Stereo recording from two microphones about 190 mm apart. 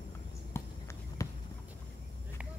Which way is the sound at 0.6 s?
10° left (ahead or behind).